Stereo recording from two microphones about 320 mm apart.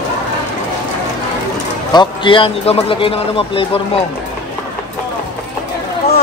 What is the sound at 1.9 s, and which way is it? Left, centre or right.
A man's voice, centre.